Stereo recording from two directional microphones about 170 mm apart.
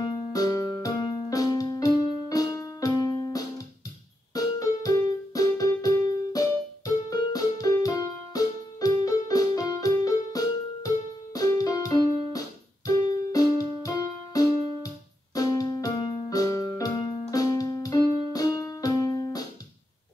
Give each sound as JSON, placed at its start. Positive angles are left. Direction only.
{"t": 0.0, "sound": "music", "side_deg": 25}
{"t": 4.3, "sound": "keyboard", "side_deg": 20}
{"t": 7.1, "sound": "music", "side_deg": 20}